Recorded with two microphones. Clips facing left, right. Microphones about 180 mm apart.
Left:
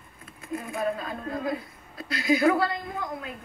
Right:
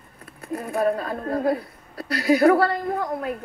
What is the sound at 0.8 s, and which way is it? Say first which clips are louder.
A woman's voice: right 8 dB; 55° right (ahead or behind).